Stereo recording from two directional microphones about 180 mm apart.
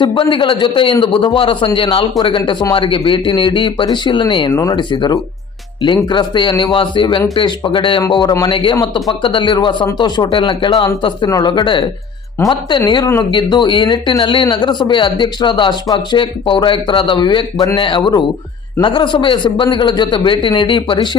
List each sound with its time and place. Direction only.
0.0 s speech: 25° left (ahead or behind)